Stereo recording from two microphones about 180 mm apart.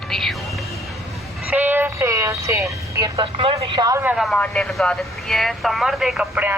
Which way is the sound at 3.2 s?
30° right (ahead or behind).